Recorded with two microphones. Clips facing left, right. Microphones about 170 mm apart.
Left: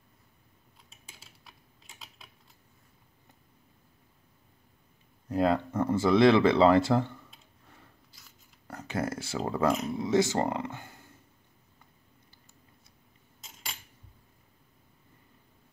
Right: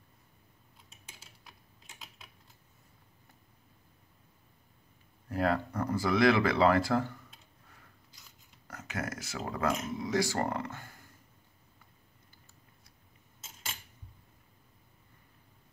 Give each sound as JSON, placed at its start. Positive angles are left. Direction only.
{"t": 1.1, "sound": "typing", "side_deg": 0}
{"t": 5.3, "sound": "speech", "side_deg": 20}
{"t": 8.6, "sound": "speech", "side_deg": 30}
{"t": 13.4, "sound": "a sound", "side_deg": 0}